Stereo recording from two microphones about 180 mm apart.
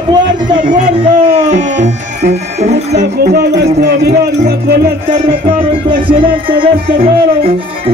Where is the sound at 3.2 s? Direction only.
60° right (ahead or behind).